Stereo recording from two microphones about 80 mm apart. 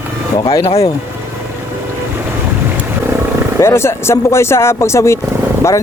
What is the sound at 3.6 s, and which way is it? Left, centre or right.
Speech, left.